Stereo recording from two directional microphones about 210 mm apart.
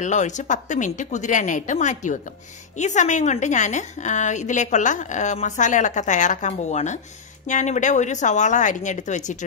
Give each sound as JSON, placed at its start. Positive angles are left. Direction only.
{"t": 0.0, "sound": "a woman's voice", "side_deg": 35}